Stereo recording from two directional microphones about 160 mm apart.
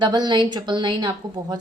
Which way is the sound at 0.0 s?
25° right (ahead or behind).